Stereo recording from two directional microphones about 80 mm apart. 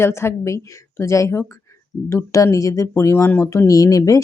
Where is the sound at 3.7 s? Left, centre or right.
Left.